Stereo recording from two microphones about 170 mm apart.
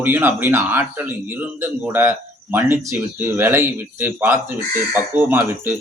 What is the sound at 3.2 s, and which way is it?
Speech, 10° right (ahead or behind).